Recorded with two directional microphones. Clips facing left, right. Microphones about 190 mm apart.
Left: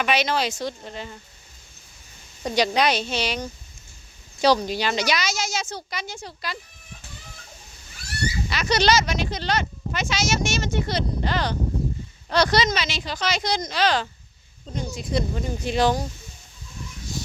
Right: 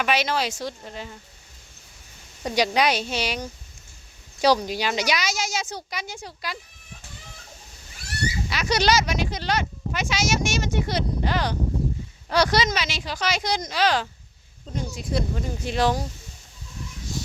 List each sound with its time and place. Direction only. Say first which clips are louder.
0.0 s speech: left 1 dB; 5° right (ahead or behind)
2.4 s speech: left 1 dB; 10° right (ahead or behind)
8.4 s speech: left 1 dB; 10° right (ahead or behind)